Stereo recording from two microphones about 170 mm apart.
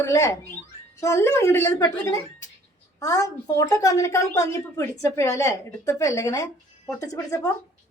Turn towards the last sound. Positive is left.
turn(degrees=20)  # may be behind; listen again after turning